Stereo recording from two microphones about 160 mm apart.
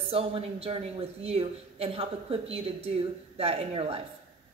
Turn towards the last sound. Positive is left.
turn(degrees=-40)  # may be behind; listen again after turning